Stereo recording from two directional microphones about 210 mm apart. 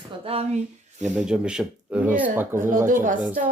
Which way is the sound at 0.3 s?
25° right (ahead or behind).